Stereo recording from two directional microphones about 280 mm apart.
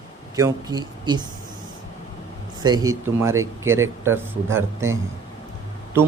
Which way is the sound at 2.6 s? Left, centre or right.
Centre.